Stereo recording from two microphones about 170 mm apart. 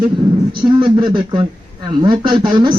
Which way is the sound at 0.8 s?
30° right (ahead or behind).